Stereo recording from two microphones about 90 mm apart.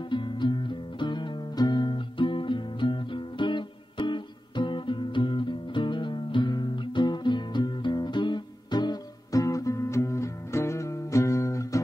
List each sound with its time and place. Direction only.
0.1 s music: 65° left (ahead or behind); by 11.8 s 35° left (ahead or behind)